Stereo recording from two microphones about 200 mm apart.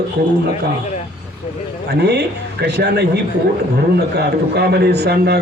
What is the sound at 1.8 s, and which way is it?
A man's voice, 55° right (ahead or behind).